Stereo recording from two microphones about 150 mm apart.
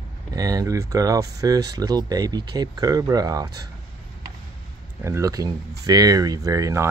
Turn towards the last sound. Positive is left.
turn(degrees=-20)  # may be behind; listen again after turning